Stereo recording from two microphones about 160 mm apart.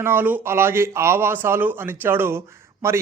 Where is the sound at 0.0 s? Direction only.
15° right (ahead or behind).